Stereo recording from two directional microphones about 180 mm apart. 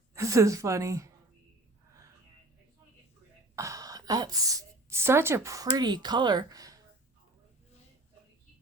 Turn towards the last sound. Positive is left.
turn(degrees=-20)  # may be behind; listen again after turning